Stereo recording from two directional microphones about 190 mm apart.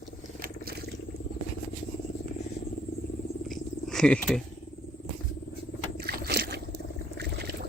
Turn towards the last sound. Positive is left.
turn(degrees=-55)  # may be behind; listen again after turning